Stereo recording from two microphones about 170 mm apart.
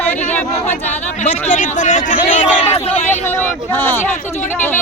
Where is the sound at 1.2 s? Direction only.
45° left (ahead or behind).